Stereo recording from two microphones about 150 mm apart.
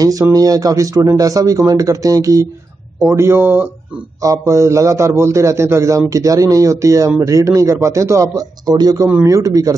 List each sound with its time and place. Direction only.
0.0 s a man's voice: 25° right (ahead or behind)